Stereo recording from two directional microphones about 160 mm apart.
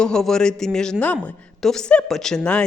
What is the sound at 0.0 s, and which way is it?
A woman's voice, 5° left (ahead or behind).